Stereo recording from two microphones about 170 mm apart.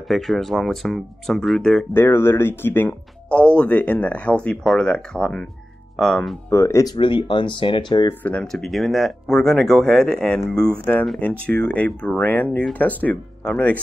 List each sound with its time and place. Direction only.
0.1 s speech: centre (ahead or behind)
6.5 s speech: 15° left (ahead or behind)
8.1 s speech: 10° left (ahead or behind)